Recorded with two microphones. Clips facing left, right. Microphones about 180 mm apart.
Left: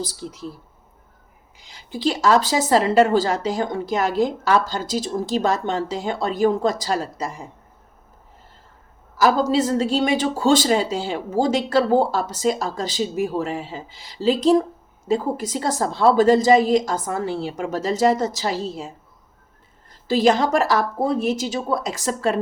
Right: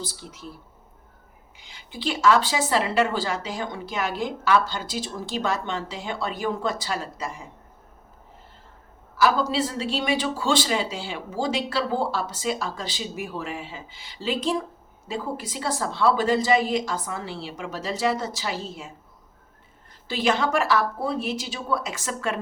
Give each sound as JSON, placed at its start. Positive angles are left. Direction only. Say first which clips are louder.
{"t": 0.0, "sound": "speech", "louder": "left 7 dB", "side_deg": 40}
{"t": 1.5, "sound": "speech", "louder": "left 6 dB", "side_deg": 40}
{"t": 9.1, "sound": "a woman's voice", "louder": "left 4 dB", "side_deg": 40}
{"t": 20.1, "sound": "speech", "louder": "left 6 dB", "side_deg": 40}